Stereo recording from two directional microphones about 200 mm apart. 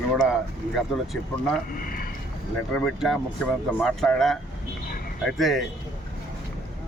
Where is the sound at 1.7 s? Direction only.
45° left (ahead or behind).